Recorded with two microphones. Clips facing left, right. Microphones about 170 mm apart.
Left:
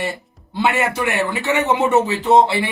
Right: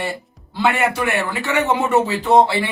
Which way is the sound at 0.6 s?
20° left (ahead or behind).